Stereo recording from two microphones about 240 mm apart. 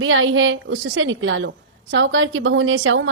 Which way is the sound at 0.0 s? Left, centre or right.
Right.